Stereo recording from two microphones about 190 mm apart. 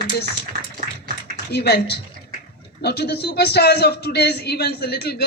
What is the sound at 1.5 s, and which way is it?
Speech, 60° left (ahead or behind).